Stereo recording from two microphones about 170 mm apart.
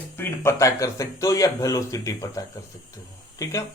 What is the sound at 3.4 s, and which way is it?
Speech, 20° left (ahead or behind).